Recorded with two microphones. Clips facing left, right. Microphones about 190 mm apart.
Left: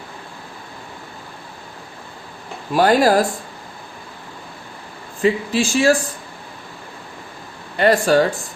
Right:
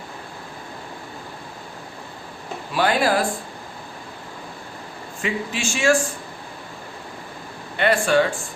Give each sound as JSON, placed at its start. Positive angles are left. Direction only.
{"t": 2.7, "sound": "speech", "side_deg": 40}
{"t": 5.2, "sound": "speech", "side_deg": 35}
{"t": 7.8, "sound": "speech", "side_deg": 40}